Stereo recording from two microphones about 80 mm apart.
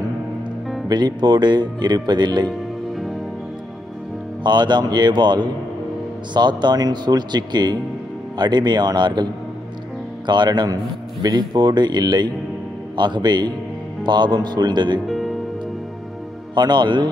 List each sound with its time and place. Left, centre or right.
0.8 s speech: right
4.4 s a man's voice: right
15.0 s music: centre
16.5 s a man's voice: right